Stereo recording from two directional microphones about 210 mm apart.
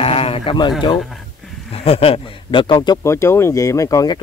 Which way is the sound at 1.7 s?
30° left (ahead or behind).